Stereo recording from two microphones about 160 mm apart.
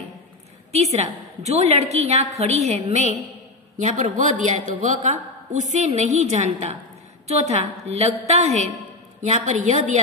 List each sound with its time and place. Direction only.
0.9 s a woman's voice: 45° right (ahead or behind)